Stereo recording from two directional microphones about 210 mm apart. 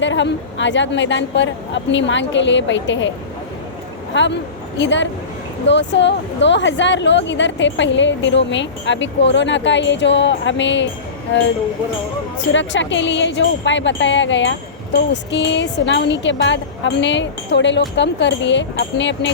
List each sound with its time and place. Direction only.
0.0 s speech: 60° left (ahead or behind)
4.1 s speech: 60° left (ahead or behind)
12.5 s speech: 60° left (ahead or behind)